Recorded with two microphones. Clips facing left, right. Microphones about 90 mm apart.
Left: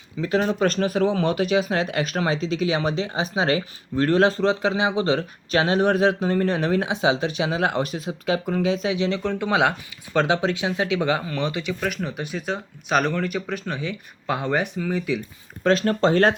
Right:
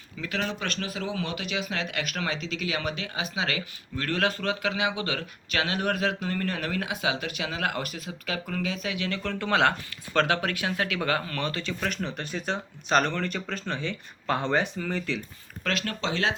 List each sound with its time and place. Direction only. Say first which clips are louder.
0.2 s speech: left 10 dB; 30° left (ahead or behind); by 11.7 s 15° left (ahead or behind)
11.8 s speech: left 4 dB; 5° left (ahead or behind)
15.6 s speech: left 11 dB; 35° left (ahead or behind)